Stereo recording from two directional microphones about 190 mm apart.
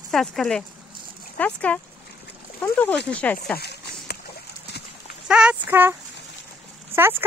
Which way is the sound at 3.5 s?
60° left (ahead or behind).